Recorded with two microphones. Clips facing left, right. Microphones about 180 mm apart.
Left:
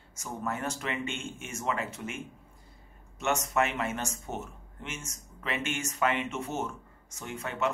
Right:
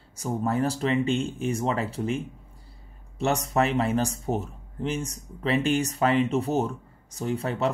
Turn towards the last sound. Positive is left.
turn(degrees=-35)  # may be behind; listen again after turning